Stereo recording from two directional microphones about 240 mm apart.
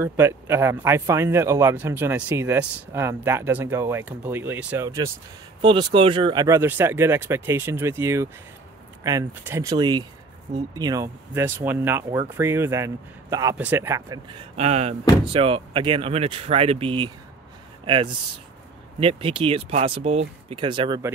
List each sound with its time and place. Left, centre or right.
0.0 s speech: centre
14.5 s speech: right